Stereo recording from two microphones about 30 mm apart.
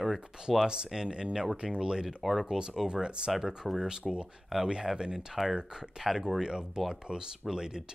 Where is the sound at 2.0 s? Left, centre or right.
Centre.